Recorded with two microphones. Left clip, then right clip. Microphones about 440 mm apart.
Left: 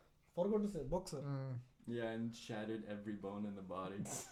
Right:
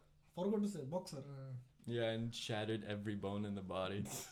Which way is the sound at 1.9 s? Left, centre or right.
Right.